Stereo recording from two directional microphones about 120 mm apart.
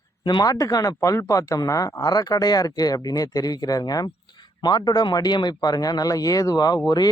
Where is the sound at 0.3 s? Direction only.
35° left (ahead or behind).